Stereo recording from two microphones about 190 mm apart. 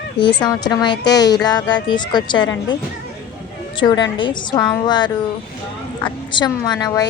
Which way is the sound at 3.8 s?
25° left (ahead or behind).